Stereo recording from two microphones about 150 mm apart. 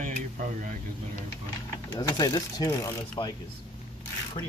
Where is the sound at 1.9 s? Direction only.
25° left (ahead or behind).